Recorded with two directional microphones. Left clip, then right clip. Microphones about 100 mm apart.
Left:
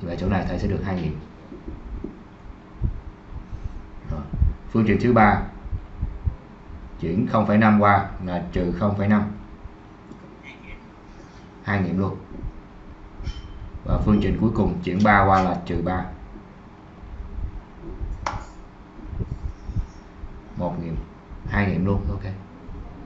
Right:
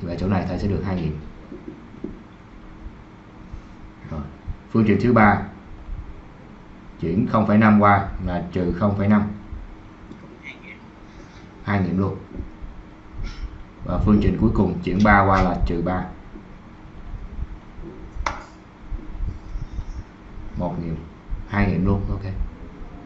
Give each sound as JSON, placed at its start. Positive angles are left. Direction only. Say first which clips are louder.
{"t": 0.0, "sound": "a man's voice", "louder": "right 1 dB", "side_deg": -5}
{"t": 2.0, "sound": "a sound", "louder": "right 2 dB", "side_deg": -20}
{"t": 4.7, "sound": "speech", "louder": "right 1 dB", "side_deg": -10}
{"t": 7.0, "sound": "speech", "louder": "right 1 dB", "side_deg": -10}
{"t": 11.6, "sound": "speech", "louder": "right 1 dB", "side_deg": -10}
{"t": 13.8, "sound": "speech", "louder": "right 2 dB", "side_deg": -10}
{"t": 18.3, "sound": "a sound", "louder": "right 2 dB", "side_deg": -20}
{"t": 20.5, "sound": "a sound", "louder": "even", "side_deg": -15}
{"t": 21.5, "sound": "a man's voice", "louder": "right 1 dB", "side_deg": -5}